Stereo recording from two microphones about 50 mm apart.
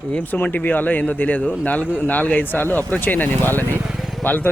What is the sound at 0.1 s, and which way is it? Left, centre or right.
Speech, left.